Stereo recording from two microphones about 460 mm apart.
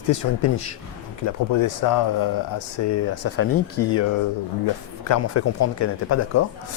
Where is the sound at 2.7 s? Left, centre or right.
Left.